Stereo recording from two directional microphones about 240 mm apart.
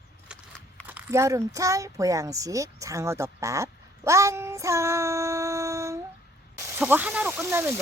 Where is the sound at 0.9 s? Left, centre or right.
Centre.